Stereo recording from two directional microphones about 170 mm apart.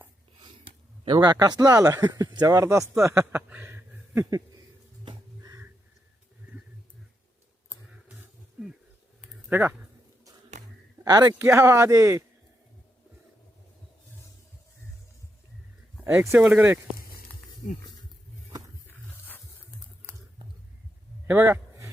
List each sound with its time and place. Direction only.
0.4 s speech: 30° right (ahead or behind)
5.4 s a sound: 20° right (ahead or behind)
8.6 s insect: 5° right (ahead or behind)
9.5 s speech: 10° right (ahead or behind)
11.0 s a man's voice: 20° right (ahead or behind)
16.0 s speech: 15° right (ahead or behind)
18.9 s roaring cats: 10° left (ahead or behind)
21.2 s a sound: 10° right (ahead or behind)